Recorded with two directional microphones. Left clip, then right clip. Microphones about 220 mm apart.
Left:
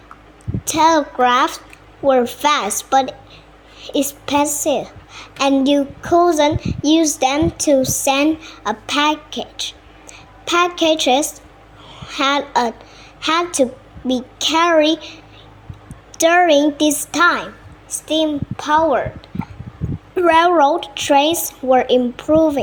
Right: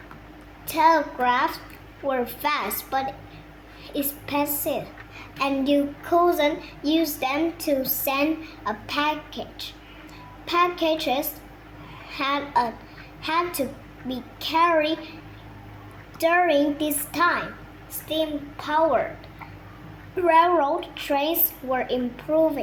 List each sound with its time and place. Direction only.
0.7 s a woman's voice: 45° left (ahead or behind)
16.2 s a woman's voice: 40° left (ahead or behind)
20.1 s a woman's voice: 45° left (ahead or behind)